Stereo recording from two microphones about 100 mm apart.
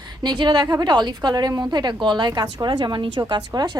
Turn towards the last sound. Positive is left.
turn(degrees=-45)  # may be behind; listen again after turning